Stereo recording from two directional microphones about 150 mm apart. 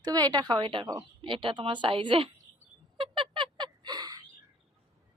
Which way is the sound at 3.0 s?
35° right (ahead or behind).